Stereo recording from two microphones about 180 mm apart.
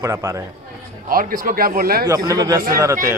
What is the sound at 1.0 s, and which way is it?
A man's voice, 50° right (ahead or behind).